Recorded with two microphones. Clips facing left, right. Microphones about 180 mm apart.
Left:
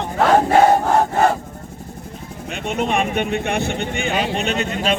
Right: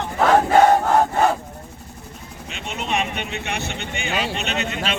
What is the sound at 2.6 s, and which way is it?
Speech, 50° left (ahead or behind).